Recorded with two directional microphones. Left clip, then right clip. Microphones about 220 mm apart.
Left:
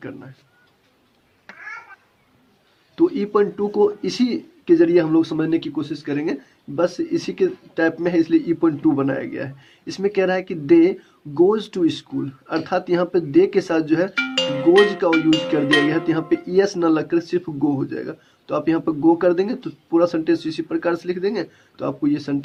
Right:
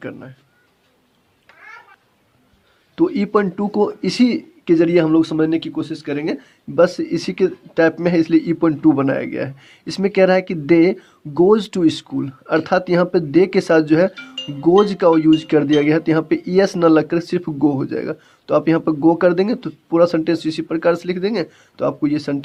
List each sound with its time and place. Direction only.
2.9 s speech: 50° right (ahead or behind)
14.2 s speech: 40° left (ahead or behind)
14.8 s speech: 50° right (ahead or behind)